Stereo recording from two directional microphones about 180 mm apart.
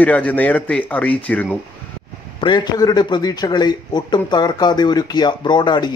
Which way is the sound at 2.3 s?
25° left (ahead or behind).